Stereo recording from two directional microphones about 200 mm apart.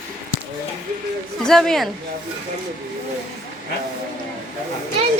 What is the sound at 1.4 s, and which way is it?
Speech, centre (ahead or behind).